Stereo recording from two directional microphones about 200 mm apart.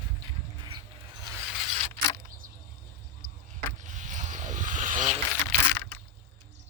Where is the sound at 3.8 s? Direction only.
35° right (ahead or behind).